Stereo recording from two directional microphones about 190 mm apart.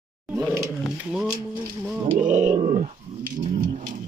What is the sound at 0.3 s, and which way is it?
Speech, 5° right (ahead or behind).